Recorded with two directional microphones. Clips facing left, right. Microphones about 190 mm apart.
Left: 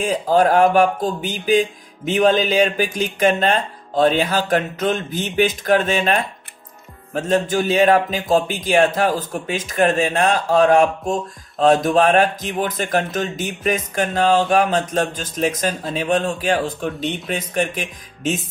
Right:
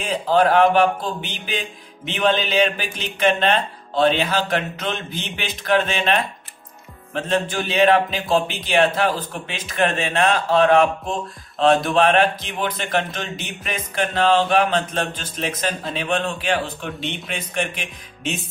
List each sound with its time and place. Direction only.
0.0 s a man's voice: 45° left (ahead or behind)